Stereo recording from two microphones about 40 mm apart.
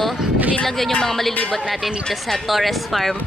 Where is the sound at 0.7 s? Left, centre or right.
Centre.